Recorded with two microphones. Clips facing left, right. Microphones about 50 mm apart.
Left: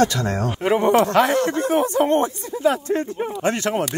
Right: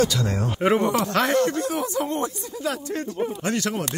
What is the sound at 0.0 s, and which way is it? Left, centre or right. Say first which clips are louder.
Speech: left 3 dB; left.